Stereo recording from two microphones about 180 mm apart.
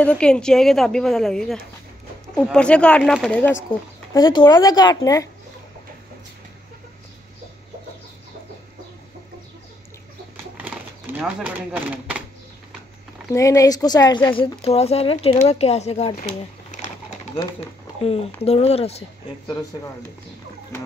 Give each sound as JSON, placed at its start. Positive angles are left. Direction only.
{"t": 0.0, "sound": "a woman's voice", "side_deg": 5}
{"t": 4.1, "sound": "speech", "side_deg": 25}
{"t": 11.1, "sound": "a woman's voice", "side_deg": -5}
{"t": 13.3, "sound": "speech", "side_deg": 20}
{"t": 18.4, "sound": "speech", "side_deg": 35}